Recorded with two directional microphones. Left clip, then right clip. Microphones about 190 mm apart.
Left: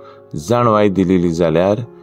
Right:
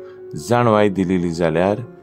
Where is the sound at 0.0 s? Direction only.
15° left (ahead or behind).